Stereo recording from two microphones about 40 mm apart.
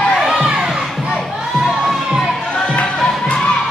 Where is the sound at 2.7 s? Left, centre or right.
Left.